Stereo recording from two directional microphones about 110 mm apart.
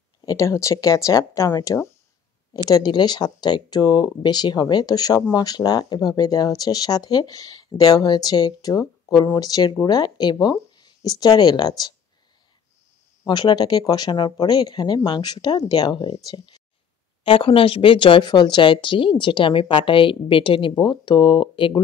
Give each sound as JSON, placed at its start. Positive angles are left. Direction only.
{"t": 0.2, "sound": "speech", "side_deg": 30}
{"t": 13.3, "sound": "speech", "side_deg": 40}
{"t": 17.2, "sound": "speech", "side_deg": 55}